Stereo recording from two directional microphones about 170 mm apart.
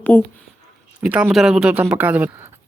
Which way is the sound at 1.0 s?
5° right (ahead or behind).